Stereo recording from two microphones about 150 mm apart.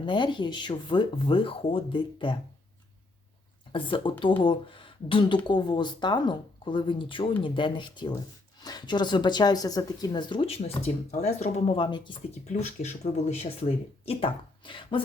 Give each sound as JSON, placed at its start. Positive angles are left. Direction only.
{"t": 0.0, "sound": "speech", "side_deg": 35}
{"t": 3.7, "sound": "speech", "side_deg": 35}
{"t": 10.6, "sound": "speech", "side_deg": 50}
{"t": 12.5, "sound": "speech", "side_deg": 50}